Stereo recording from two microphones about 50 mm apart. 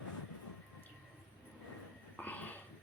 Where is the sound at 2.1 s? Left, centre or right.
Left.